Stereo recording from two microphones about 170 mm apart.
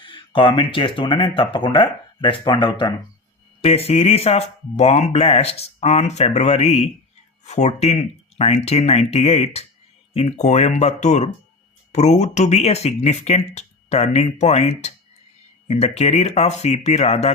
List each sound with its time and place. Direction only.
0.0 s speech: 30° left (ahead or behind)